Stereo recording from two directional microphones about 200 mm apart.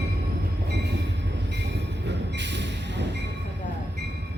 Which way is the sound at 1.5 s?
60° right (ahead or behind).